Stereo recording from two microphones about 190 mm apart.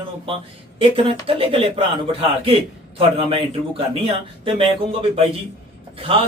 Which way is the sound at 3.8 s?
30° right (ahead or behind).